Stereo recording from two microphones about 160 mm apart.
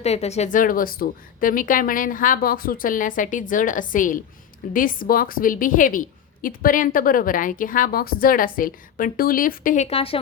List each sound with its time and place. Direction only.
0.0 s a woman's voice: 40° left (ahead or behind)